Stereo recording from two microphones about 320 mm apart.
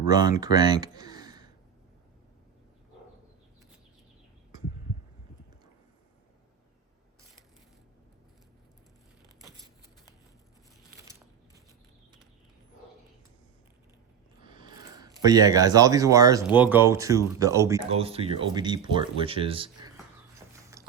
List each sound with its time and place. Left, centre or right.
0.0 s speech: centre
14.4 s speech: centre
20.5 s a sound: centre